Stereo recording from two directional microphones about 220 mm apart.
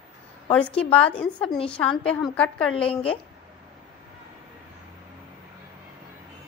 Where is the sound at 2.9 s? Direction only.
25° left (ahead or behind).